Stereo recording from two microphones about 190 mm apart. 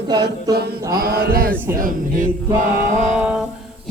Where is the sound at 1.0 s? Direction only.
50° right (ahead or behind).